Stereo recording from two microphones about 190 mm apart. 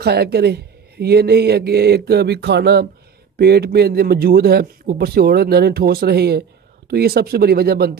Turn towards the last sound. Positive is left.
turn(degrees=-55)  # may be behind; listen again after turning